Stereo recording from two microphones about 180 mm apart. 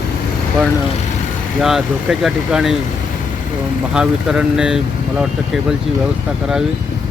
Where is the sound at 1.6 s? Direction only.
Centre (ahead or behind).